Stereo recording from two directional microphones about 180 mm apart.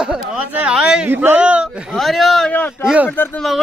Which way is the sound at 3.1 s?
10° left (ahead or behind).